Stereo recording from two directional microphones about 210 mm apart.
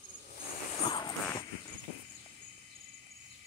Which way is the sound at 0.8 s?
20° left (ahead or behind).